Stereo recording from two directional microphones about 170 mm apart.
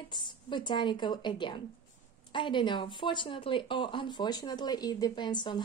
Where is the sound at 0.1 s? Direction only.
25° left (ahead or behind).